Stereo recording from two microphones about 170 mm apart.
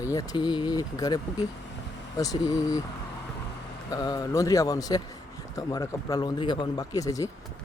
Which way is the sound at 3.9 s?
25° left (ahead or behind).